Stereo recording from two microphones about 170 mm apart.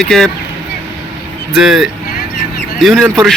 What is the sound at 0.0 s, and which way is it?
Speech, centre (ahead or behind).